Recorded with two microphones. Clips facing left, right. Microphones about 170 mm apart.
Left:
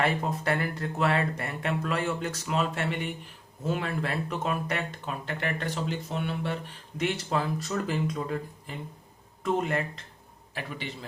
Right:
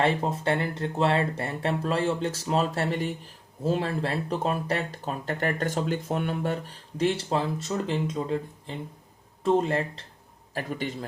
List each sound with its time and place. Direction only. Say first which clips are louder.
0.0 s speech: right 3 dB; 25° right (ahead or behind)
10.5 s a man's voice: right 6 dB; 45° right (ahead or behind)